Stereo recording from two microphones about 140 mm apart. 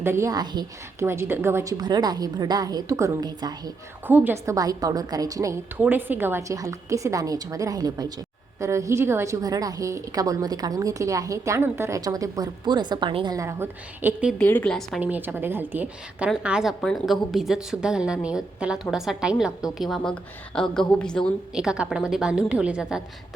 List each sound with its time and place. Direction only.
0.0 s a woman's voice: 20° right (ahead or behind)
1.8 s a woman's voice: 30° right (ahead or behind)
4.0 s a woman's voice: 15° right (ahead or behind)
4.5 s a woman's voice: 25° right (ahead or behind)
13.4 s a woman's voice: 20° right (ahead or behind)
14.3 s a woman's voice: 10° left (ahead or behind)
15.0 s a woman's voice: 10° right (ahead or behind); by 21.3 s 5° left (ahead or behind)
21.5 s a woman's voice: 5° right (ahead or behind)